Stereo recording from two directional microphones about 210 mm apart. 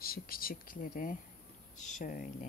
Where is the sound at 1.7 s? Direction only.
35° left (ahead or behind).